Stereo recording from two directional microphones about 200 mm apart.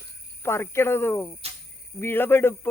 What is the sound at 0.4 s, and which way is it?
Speech, 15° left (ahead or behind).